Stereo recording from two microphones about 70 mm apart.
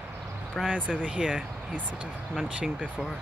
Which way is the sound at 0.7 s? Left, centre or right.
Right.